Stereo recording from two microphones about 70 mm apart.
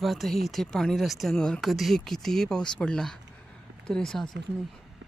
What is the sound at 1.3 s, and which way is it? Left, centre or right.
Speech, centre.